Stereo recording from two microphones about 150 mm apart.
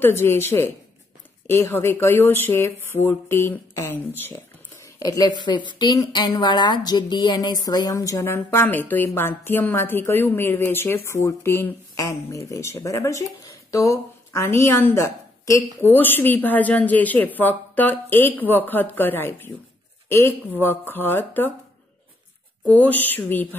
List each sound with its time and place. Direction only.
0.0 s a woman's voice: 15° left (ahead or behind)
4.9 s a woman's voice: 25° left (ahead or behind)
22.7 s a woman's voice: 10° left (ahead or behind)